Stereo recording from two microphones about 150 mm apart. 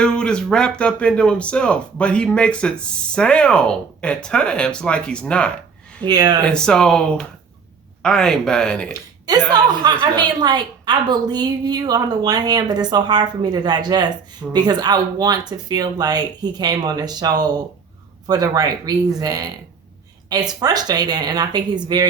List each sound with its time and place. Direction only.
0.0 s speech: 5° left (ahead or behind)
6.0 s a woman's voice: 30° right (ahead or behind)
6.4 s speech: 5° left (ahead or behind)
8.9 s a sound: 25° right (ahead or behind)
9.5 s a woman's voice: 30° right (ahead or behind)